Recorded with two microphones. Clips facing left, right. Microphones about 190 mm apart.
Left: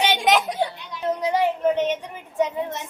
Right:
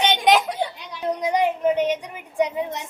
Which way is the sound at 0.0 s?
5° left (ahead or behind).